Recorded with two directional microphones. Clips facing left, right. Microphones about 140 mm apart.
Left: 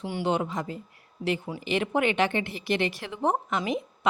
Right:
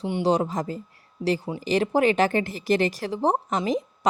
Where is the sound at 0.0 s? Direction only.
35° right (ahead or behind).